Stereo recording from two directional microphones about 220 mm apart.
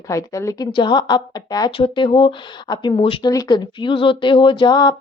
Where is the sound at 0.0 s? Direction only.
15° left (ahead or behind).